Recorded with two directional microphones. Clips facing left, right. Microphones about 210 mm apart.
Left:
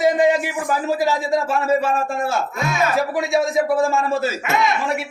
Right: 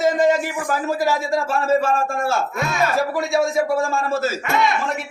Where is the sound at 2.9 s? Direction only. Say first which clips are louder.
Left 1 dB; 15° left (ahead or behind).